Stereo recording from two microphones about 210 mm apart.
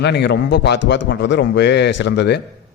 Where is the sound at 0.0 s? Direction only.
55° left (ahead or behind).